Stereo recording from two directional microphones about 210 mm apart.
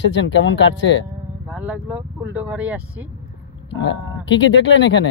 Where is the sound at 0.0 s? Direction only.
60° left (ahead or behind).